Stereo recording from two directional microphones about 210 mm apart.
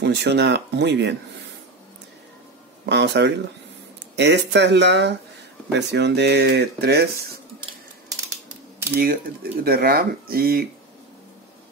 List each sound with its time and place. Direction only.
0.0 s speech: 55° right (ahead or behind)
2.9 s speech: 55° right (ahead or behind)
9.0 s speech: 45° right (ahead or behind)